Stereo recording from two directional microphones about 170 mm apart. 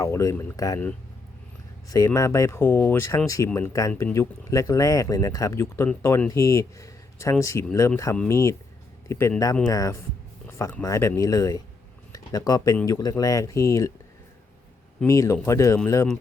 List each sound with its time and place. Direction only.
0.0 s speech: 20° left (ahead or behind)
2.0 s speech: 20° left (ahead or behind)
10.4 s a sound: 10° left (ahead or behind)
10.8 s speech: 20° left (ahead or behind)
15.0 s speech: 15° left (ahead or behind)